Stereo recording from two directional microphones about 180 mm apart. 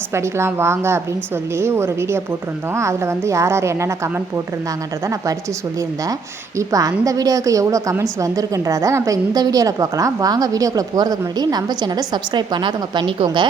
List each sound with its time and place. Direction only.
0.1 s a woman's voice: 15° right (ahead or behind)
6.6 s a woman's voice: 20° right (ahead or behind)